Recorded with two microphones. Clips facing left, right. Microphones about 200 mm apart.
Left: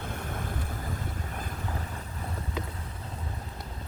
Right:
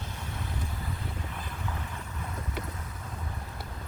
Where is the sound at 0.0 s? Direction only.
50° left (ahead or behind).